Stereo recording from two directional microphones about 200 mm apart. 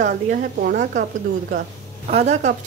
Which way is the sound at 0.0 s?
40° right (ahead or behind).